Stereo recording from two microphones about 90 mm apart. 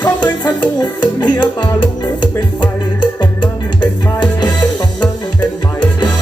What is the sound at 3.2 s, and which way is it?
Music, 55° left (ahead or behind).